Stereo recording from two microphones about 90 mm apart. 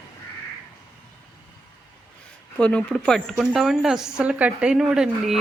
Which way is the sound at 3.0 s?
5° left (ahead or behind).